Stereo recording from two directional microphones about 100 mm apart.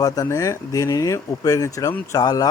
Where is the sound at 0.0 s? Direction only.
35° left (ahead or behind).